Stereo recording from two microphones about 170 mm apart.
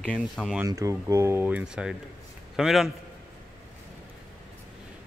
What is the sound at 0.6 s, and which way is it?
Speech, 20° right (ahead or behind).